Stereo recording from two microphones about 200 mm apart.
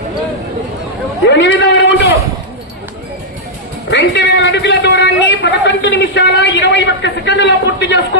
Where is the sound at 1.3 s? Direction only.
60° left (ahead or behind).